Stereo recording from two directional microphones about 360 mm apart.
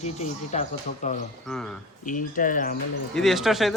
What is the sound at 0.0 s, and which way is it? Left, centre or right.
Speech, centre.